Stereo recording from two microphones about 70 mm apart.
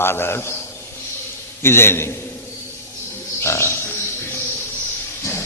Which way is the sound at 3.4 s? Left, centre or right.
Left.